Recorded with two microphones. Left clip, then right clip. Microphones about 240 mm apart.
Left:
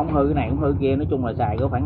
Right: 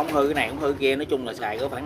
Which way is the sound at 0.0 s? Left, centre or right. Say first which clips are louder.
Left 1 dB; right.